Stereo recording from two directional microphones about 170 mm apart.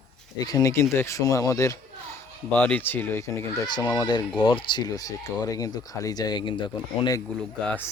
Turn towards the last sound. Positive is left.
turn(degrees=5)  # may be behind; listen again after turning